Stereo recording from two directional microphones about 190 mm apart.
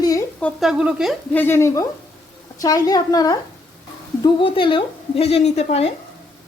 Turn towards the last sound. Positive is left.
turn(degrees=35)  # may be behind; listen again after turning